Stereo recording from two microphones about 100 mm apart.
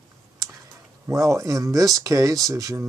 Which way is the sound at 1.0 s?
30° right (ahead or behind).